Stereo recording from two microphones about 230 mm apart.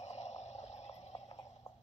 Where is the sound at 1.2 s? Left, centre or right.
Centre.